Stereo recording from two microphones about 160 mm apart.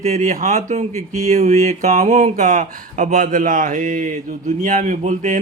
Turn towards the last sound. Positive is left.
turn(degrees=-50)  # may be behind; listen again after turning